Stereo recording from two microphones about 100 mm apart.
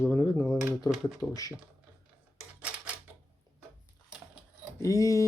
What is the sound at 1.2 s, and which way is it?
Speech, 35° left (ahead or behind).